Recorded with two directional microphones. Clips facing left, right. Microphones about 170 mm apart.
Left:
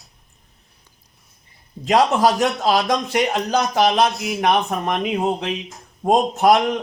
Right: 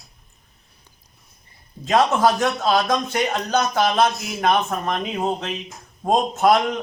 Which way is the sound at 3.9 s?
30° left (ahead or behind).